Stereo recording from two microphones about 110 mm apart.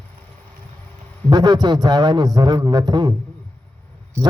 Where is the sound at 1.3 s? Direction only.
40° right (ahead or behind).